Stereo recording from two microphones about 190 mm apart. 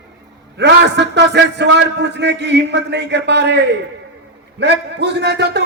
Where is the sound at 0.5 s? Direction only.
65° right (ahead or behind).